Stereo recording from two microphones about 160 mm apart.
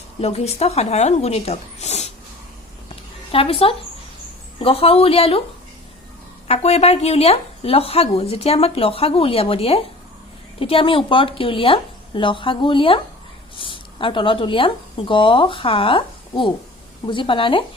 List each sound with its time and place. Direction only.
0.2 s speech: 40° left (ahead or behind)
3.3 s speech: 35° left (ahead or behind)
6.5 s speech: 40° left (ahead or behind)